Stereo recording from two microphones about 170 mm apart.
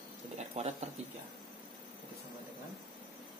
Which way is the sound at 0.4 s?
40° right (ahead or behind).